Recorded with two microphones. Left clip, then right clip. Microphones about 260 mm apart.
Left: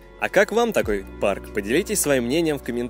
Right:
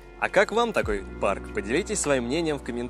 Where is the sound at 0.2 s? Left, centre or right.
Left.